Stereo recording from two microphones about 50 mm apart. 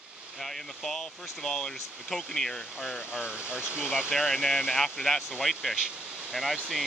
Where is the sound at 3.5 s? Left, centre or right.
Right.